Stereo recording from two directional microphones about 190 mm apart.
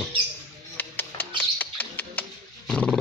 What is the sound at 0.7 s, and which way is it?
Music, 10° left (ahead or behind).